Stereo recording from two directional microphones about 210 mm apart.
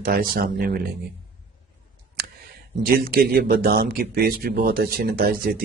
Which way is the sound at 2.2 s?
45° right (ahead or behind).